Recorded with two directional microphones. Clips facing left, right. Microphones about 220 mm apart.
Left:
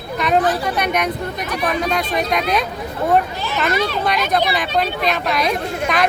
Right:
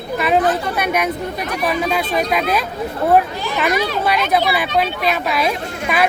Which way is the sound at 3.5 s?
10° right (ahead or behind).